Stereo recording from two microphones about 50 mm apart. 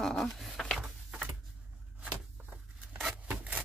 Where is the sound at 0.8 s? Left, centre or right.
Right.